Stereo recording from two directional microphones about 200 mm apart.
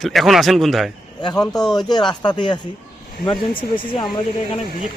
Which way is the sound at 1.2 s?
20° left (ahead or behind).